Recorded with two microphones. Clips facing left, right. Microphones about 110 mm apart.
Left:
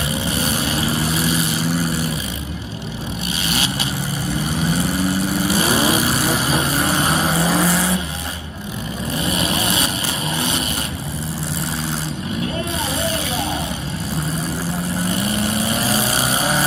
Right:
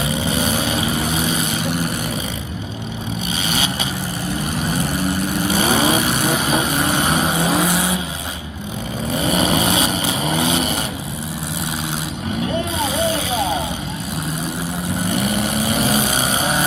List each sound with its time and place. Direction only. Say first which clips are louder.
0.3 s vehicle: right 2 dB; 25° right (ahead or behind)
5.5 s vehicle: right 2 dB; 25° right (ahead or behind)
5.9 s vehicle: even; centre (ahead or behind)
9.2 s vehicle: right 5 dB; 30° right (ahead or behind)
15.4 s vehicle: right 1 dB; centre (ahead or behind)